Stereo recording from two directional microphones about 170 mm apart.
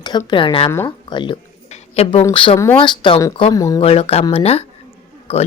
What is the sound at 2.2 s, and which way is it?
Speech, 25° left (ahead or behind).